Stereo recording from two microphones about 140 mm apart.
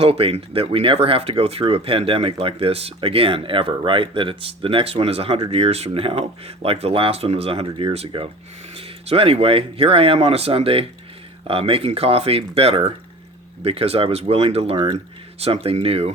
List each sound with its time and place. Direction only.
0.0 s speech: 45° right (ahead or behind)